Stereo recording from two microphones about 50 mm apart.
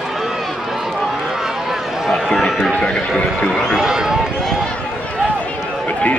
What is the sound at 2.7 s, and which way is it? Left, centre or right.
Run, centre.